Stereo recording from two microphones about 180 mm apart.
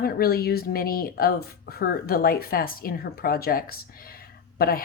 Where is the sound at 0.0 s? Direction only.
55° left (ahead or behind).